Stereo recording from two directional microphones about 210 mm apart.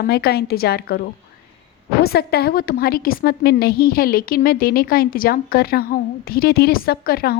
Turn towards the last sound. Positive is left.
turn(degrees=45)  # may be behind; listen again after turning